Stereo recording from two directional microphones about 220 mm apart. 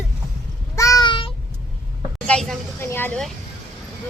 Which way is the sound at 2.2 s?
5° left (ahead or behind).